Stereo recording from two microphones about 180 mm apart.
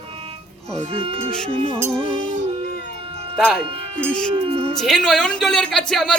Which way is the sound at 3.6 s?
30° right (ahead or behind).